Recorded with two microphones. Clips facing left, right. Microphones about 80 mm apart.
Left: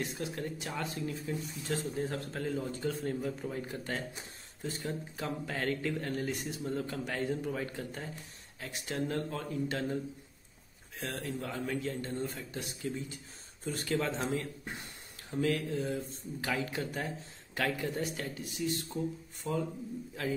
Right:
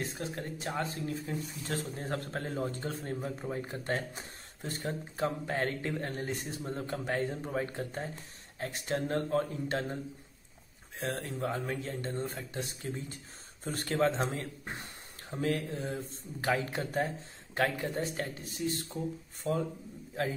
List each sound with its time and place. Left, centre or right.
0.0 s speech: right
11.1 s speech: right
20.2 s speech: right